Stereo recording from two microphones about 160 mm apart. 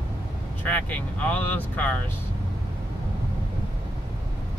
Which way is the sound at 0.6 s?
10° left (ahead or behind).